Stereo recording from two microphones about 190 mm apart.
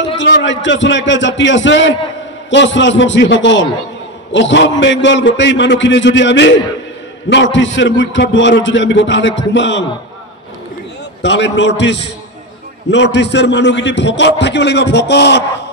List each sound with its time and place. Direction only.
0.2 s a man's voice: 70° left (ahead or behind)
11.2 s a man's voice: 65° left (ahead or behind)